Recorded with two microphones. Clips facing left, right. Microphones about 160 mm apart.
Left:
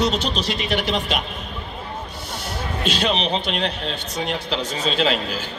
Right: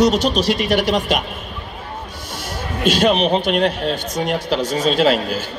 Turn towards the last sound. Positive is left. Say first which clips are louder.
# right 6 dB
turn(degrees=-45)  # may be behind; listen again after turning